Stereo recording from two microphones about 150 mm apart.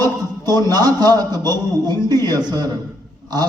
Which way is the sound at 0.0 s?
25° right (ahead or behind).